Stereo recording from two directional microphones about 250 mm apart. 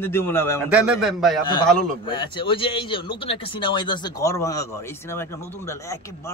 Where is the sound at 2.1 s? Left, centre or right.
Centre.